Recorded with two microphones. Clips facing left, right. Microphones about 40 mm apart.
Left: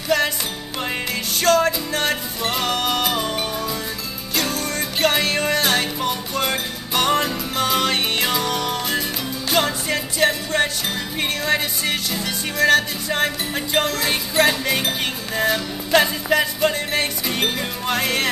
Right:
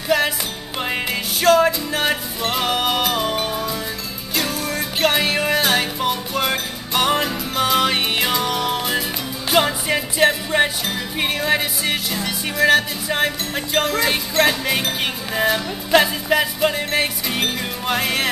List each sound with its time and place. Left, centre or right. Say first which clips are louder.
0.1 s music: right 1 dB; centre
1.4 s music: right 3 dB; centre